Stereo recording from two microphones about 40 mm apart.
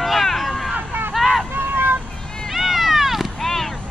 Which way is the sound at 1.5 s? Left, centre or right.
Right.